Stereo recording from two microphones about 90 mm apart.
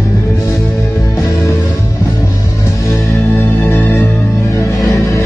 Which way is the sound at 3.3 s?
25° left (ahead or behind).